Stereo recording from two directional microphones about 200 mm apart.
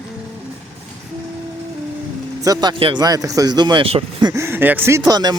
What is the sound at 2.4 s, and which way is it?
Speech, 20° right (ahead or behind).